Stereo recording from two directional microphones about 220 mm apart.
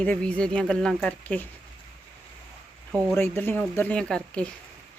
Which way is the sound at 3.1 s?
10° left (ahead or behind).